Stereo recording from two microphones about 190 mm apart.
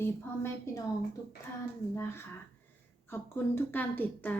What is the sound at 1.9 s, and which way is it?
Speech, 10° left (ahead or behind).